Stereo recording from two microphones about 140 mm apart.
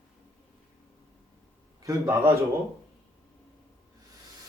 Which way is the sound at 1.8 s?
20° right (ahead or behind).